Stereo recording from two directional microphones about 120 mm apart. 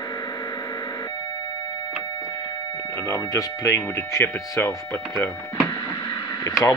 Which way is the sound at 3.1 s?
20° left (ahead or behind).